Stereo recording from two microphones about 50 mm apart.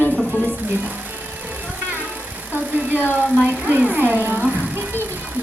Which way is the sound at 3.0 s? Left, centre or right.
Left.